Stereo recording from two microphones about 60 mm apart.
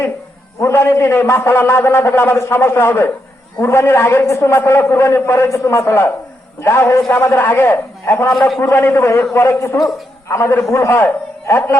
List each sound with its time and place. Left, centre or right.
0.6 s a man's voice: left
8.3 s a man's voice: centre
8.7 s a man's voice: left
9.6 s a woman's voice: left
10.2 s a man's voice: left